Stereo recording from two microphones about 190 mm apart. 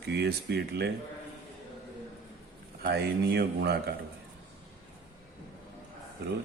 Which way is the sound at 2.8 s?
60° right (ahead or behind).